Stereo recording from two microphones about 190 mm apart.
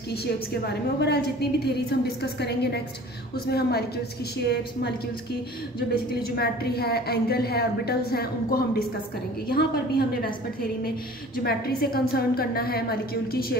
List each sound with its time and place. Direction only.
0.1 s a woman's voice: 60° left (ahead or behind)
6.3 s a woman's voice: 55° left (ahead or behind)